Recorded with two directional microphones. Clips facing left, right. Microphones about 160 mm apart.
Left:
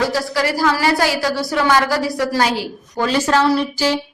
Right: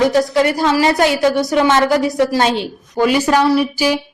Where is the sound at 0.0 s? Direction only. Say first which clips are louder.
Right 6 dB; 20° right (ahead or behind).